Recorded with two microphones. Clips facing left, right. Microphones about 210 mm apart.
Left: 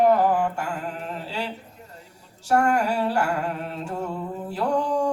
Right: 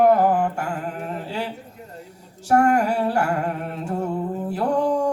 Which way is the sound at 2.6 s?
55° right (ahead or behind).